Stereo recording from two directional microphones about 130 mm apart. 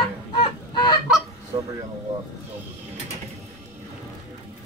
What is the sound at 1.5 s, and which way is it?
Speech, 35° right (ahead or behind).